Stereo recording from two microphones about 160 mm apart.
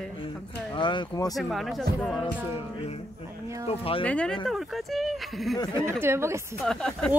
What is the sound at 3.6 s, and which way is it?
Speech, 35° left (ahead or behind).